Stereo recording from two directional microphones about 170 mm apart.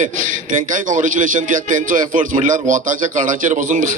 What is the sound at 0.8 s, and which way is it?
A man's voice, 50° right (ahead or behind).